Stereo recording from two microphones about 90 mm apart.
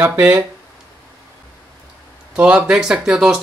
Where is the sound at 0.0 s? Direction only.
20° right (ahead or behind).